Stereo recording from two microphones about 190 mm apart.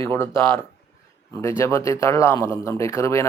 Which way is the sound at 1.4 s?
15° left (ahead or behind).